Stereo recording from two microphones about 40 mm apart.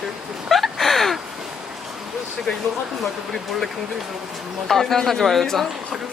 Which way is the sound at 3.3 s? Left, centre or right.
Centre.